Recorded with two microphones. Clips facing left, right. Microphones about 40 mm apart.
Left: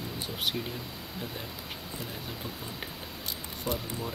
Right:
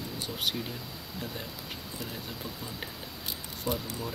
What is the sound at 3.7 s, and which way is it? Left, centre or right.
Speech, left.